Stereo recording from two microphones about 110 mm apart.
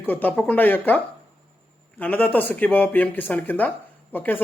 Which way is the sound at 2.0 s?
15° left (ahead or behind).